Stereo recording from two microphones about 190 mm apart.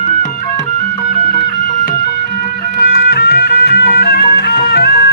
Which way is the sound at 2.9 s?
60° left (ahead or behind).